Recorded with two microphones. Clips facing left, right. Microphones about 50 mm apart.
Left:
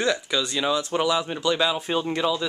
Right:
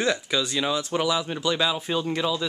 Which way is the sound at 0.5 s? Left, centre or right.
Centre.